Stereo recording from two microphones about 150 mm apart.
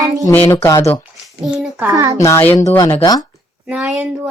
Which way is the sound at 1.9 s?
25° right (ahead or behind).